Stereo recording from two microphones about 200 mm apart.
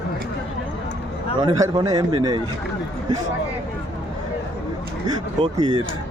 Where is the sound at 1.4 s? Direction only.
20° right (ahead or behind).